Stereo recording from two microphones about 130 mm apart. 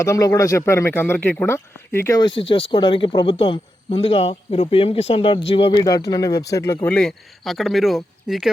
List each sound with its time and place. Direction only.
0.0 s speech: 25° left (ahead or behind)
2.1 s speech: 40° left (ahead or behind)
5.8 s speech: 30° left (ahead or behind)
6.8 s speech: 5° left (ahead or behind)